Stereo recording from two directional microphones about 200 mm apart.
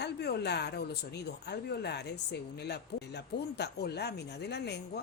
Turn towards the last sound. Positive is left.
turn(degrees=55)  # may be behind; listen again after turning